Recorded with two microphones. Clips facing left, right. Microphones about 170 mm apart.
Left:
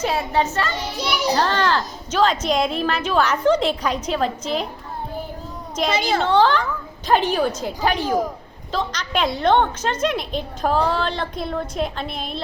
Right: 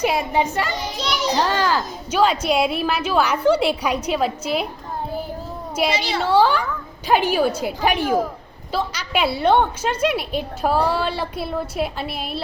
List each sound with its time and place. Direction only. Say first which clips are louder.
0.0 s a child's voice: right 1 dB; 15° right (ahead or behind)
0.9 s a child's voice: left 2 dB; 10° left (ahead or behind)
1.4 s a woman's voice: right 2 dB; 10° right (ahead or behind)
5.9 s a woman's voice: left 2 dB; 50° left (ahead or behind)
6.2 s a woman's voice: right 2 dB; 10° right (ahead or behind)
8.0 s a child's voice: right 2 dB; 15° left (ahead or behind)
8.7 s a woman's voice: right 1 dB; 10° right (ahead or behind)